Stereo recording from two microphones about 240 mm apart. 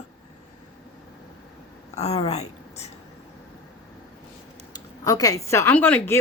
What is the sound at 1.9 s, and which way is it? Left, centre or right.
Speech, left.